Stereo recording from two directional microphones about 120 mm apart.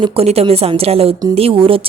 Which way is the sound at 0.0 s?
55° right (ahead or behind).